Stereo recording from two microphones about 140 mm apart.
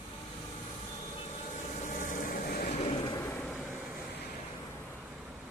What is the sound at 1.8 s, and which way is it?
Vehicle, 70° left (ahead or behind).